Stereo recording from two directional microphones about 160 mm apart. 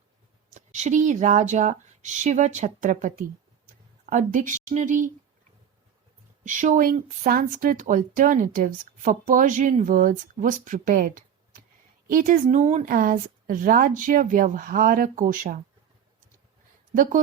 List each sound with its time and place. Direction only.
0.5 s speech: 45° right (ahead or behind)
6.4 s speech: 50° right (ahead or behind)
16.9 s speech: 60° right (ahead or behind)